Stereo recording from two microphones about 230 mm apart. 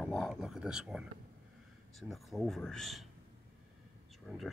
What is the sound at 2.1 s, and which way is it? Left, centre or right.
Speech, centre.